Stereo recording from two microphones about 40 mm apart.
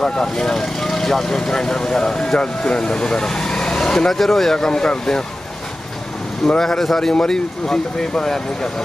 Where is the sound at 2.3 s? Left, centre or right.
Left.